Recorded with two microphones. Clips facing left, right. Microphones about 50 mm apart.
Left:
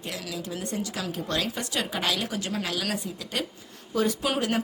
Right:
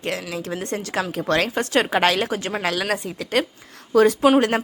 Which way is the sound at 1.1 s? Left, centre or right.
Right.